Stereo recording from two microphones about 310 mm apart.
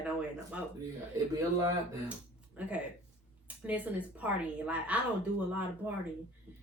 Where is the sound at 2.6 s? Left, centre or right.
Centre.